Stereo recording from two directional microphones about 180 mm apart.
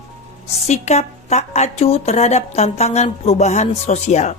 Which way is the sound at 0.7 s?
40° left (ahead or behind).